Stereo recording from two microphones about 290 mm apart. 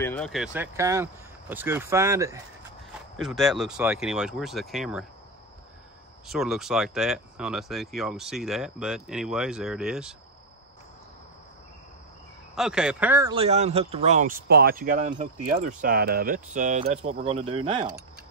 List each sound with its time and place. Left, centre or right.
0.0 s speech: centre
6.2 s speech: centre
12.5 s speech: centre